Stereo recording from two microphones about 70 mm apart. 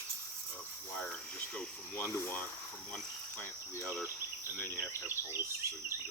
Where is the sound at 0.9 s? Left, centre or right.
Left.